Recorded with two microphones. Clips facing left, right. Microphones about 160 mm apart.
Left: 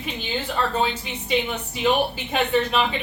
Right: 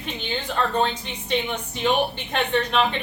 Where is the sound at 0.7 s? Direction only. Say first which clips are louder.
Right 1 dB; 5° left (ahead or behind).